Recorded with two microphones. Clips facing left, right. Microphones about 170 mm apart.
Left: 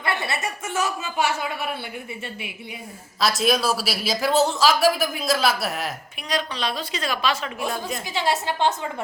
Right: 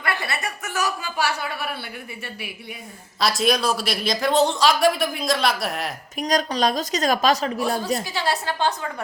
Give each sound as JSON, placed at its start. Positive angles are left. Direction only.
{"t": 0.0, "sound": "a man's voice", "side_deg": 25}
{"t": 3.2, "sound": "speech", "side_deg": 0}
{"t": 6.1, "sound": "a woman's voice", "side_deg": -40}
{"t": 8.0, "sound": "a man's voice", "side_deg": 20}